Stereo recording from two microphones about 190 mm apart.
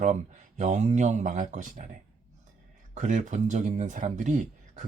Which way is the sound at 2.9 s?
40° right (ahead or behind).